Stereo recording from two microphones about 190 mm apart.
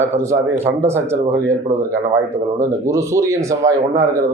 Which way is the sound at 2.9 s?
15° right (ahead or behind).